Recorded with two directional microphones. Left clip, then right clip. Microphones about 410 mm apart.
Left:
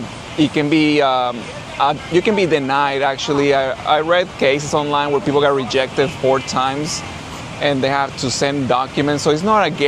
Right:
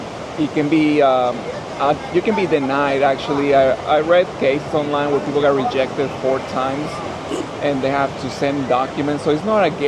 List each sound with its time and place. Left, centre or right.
0.5 s speech: left